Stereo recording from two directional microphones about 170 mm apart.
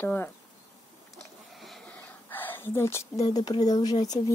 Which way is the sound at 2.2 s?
10° left (ahead or behind).